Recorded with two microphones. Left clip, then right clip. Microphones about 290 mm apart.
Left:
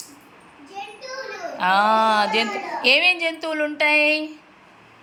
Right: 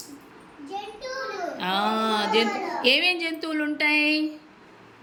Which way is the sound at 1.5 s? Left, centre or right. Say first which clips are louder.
Left 9 dB; centre.